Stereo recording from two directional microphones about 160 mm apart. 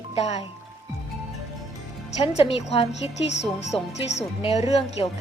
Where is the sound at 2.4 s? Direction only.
40° left (ahead or behind).